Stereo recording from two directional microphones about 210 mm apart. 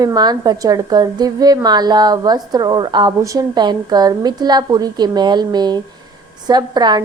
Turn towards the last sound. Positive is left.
turn(degrees=-20)  # may be behind; listen again after turning